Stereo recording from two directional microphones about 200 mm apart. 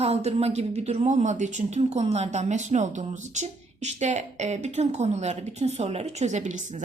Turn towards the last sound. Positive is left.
turn(degrees=-35)  # may be behind; listen again after turning